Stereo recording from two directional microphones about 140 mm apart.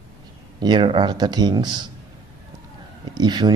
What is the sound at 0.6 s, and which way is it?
Speech, 35° right (ahead or behind).